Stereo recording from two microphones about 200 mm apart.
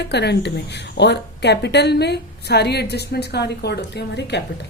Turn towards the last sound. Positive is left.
turn(degrees=55)  # may be behind; listen again after turning